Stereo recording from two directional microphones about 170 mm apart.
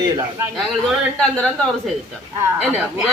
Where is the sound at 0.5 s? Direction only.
Centre (ahead or behind).